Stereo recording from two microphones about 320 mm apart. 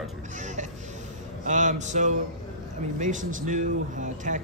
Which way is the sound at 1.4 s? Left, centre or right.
Right.